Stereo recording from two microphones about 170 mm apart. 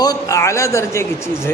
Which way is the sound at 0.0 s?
20° left (ahead or behind).